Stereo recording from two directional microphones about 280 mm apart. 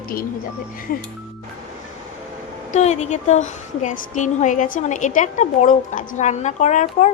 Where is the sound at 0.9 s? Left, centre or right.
Left.